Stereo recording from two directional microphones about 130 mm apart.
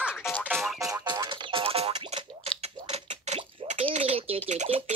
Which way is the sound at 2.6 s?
55° right (ahead or behind).